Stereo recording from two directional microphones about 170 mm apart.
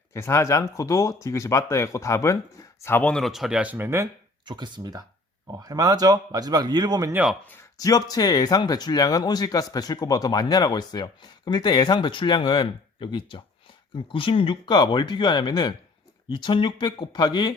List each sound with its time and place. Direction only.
0.1 s speech: 15° left (ahead or behind); by 4.1 s 15° right (ahead or behind)
4.4 s speech: 25° right (ahead or behind)
7.1 s speech: 10° right (ahead or behind)
7.4 s speech: 15° left (ahead or behind)